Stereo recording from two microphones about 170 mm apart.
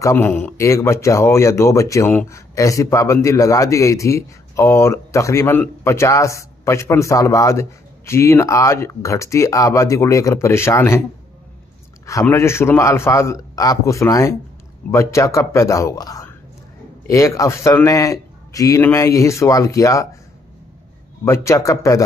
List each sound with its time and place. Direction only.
0.0 s speech: 10° left (ahead or behind)
12.1 s a man's voice: 15° left (ahead or behind)
21.2 s a man's voice: 15° left (ahead or behind)